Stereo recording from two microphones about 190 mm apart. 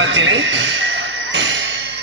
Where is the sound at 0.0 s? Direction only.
80° right.